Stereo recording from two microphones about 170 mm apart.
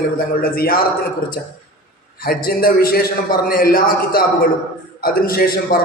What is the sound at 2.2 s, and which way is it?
A man's voice, 65° left (ahead or behind).